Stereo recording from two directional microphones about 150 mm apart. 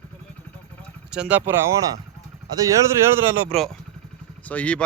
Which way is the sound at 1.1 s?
10° right (ahead or behind).